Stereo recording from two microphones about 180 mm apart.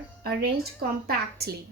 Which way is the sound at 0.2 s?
60° right (ahead or behind).